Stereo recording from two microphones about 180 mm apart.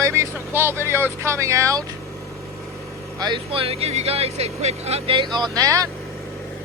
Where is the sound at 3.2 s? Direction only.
25° right (ahead or behind).